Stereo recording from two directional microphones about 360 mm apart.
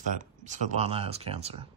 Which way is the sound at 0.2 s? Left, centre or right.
Centre.